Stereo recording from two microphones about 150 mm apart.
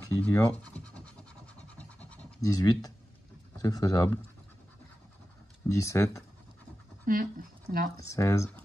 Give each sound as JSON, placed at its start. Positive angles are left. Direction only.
{"t": 0.2, "sound": "speech", "side_deg": 10}
{"t": 1.6, "sound": "scratch", "side_deg": 10}
{"t": 2.4, "sound": "speech", "side_deg": 25}
{"t": 5.7, "sound": "speech", "side_deg": 20}
{"t": 7.1, "sound": "speech", "side_deg": -70}
{"t": 8.0, "sound": "speech", "side_deg": 20}